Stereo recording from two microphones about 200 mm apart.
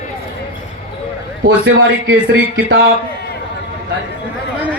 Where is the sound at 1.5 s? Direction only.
65° right (ahead or behind).